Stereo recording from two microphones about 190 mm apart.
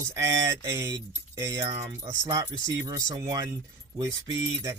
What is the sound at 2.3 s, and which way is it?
Speech, 20° right (ahead or behind).